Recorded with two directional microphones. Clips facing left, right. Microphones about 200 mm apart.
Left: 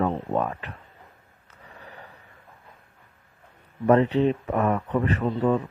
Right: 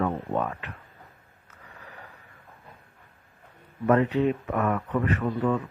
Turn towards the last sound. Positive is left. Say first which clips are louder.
# left 3 dB
turn(degrees=35)  # may be behind; listen again after turning